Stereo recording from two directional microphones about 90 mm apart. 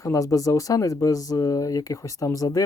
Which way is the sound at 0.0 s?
35° left (ahead or behind).